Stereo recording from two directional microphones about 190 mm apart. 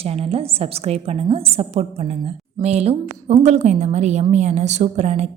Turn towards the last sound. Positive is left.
turn(degrees=-35)  # may be behind; listen again after turning